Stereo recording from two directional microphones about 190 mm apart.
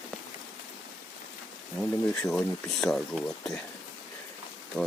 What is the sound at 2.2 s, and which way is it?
Speech, 5° left (ahead or behind).